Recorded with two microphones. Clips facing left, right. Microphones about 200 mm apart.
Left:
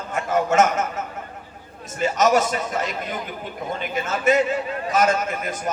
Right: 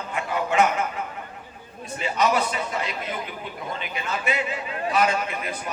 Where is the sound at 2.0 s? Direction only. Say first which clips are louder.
Left 4 dB; 45° left (ahead or behind).